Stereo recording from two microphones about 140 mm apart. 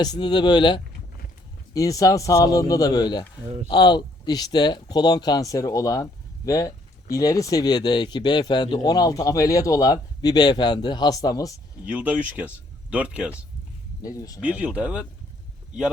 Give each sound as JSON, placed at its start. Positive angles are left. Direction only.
{"t": 0.0, "sound": "speech", "side_deg": 30}
{"t": 11.9, "sound": "speech", "side_deg": -10}
{"t": 14.0, "sound": "speech", "side_deg": 25}
{"t": 14.4, "sound": "speech", "side_deg": -10}